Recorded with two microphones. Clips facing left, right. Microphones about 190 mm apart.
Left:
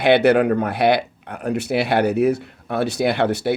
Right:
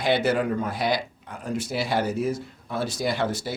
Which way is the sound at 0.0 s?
65° left (ahead or behind).